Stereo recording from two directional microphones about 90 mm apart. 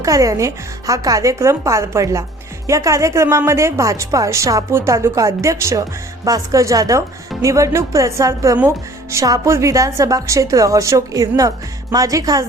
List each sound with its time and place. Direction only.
0.0 s a woman's voice: 40° right (ahead or behind)